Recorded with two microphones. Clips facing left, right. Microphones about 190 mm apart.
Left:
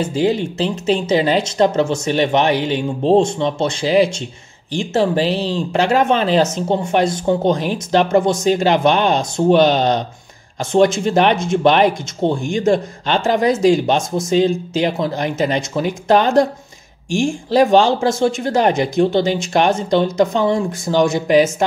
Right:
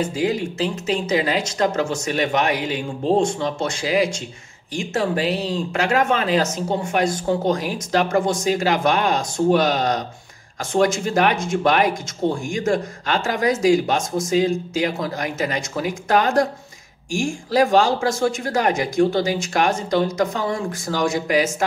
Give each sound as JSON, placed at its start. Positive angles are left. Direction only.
{"t": 0.0, "sound": "speech", "side_deg": 25}